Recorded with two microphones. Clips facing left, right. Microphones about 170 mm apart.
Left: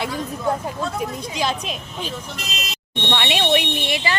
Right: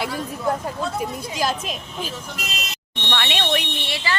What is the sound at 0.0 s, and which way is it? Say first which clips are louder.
A woman's voice: left 1 dB; 5° right (ahead or behind).